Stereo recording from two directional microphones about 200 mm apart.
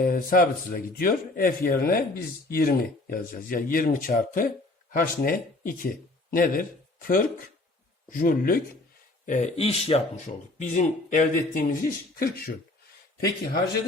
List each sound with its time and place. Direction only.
0.0 s a man's voice: 45° left (ahead or behind)
8.1 s a man's voice: 45° left (ahead or behind)